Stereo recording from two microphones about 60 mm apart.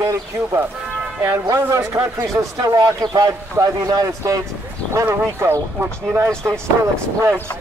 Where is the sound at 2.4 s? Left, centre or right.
Right.